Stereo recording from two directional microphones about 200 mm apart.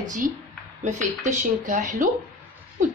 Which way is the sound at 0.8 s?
35° right (ahead or behind).